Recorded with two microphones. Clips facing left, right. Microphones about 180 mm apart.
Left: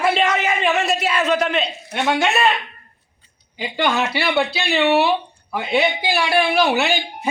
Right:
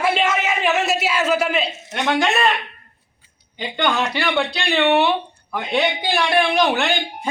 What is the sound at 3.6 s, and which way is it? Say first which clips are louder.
A man's voice: left 1 dB; 5° left (ahead or behind).